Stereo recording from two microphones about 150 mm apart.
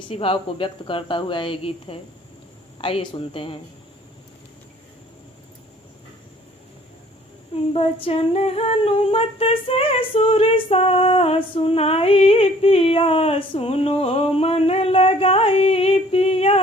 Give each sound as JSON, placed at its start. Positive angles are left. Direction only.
{"t": 0.1, "sound": "humming", "side_deg": 40}
{"t": 7.7, "sound": "humming", "side_deg": 40}